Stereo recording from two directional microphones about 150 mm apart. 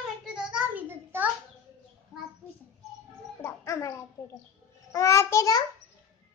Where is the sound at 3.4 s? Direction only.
20° left (ahead or behind).